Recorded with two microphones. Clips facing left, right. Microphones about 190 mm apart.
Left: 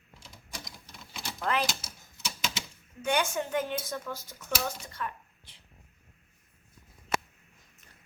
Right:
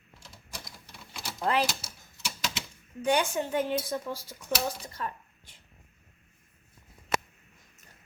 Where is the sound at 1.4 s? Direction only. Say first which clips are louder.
Right 3 dB; 30° right (ahead or behind).